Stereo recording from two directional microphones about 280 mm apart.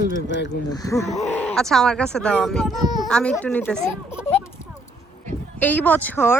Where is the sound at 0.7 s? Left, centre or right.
Centre.